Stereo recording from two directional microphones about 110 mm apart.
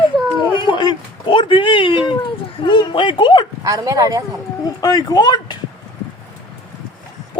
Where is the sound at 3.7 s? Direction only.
35° right (ahead or behind).